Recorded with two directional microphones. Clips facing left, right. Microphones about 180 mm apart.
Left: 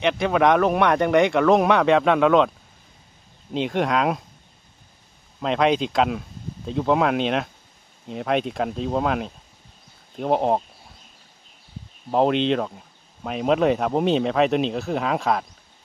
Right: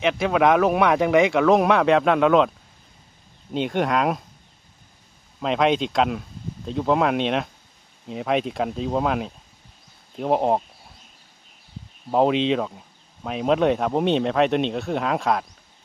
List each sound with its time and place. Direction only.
0.0 s speech: centre (ahead or behind)
3.5 s speech: centre (ahead or behind)
5.4 s speech: centre (ahead or behind)
12.1 s speech: centre (ahead or behind)